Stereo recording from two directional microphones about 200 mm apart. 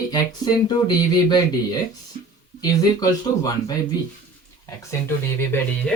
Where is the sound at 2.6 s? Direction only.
20° left (ahead or behind).